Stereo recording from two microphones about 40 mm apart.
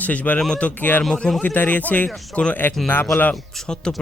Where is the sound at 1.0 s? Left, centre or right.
Centre.